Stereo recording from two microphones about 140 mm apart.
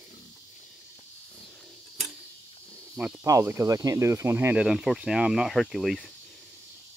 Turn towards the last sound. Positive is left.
turn(degrees=0)  # may be behind; listen again after turning